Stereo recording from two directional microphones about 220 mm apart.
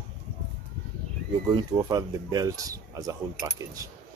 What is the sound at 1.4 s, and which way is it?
Speech, 15° right (ahead or behind).